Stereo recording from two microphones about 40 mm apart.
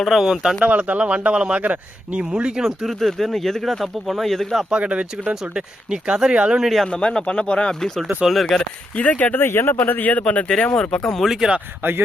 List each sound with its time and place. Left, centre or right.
0.0 s speech: centre
0.8 s speech: right
2.6 s speech: centre
3.1 s speech: centre
4.7 s speech: right
5.3 s speech: centre
6.6 s speech: centre
6.8 s speech: left
7.8 s speech: centre
9.0 s speech: left
9.3 s speech: left
10.1 s speech: left
10.8 s speech: centre
11.8 s speech: right